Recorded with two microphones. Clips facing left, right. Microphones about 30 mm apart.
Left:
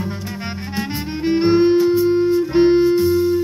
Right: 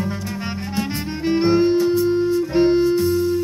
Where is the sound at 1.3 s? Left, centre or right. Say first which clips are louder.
Left 2 dB; centre.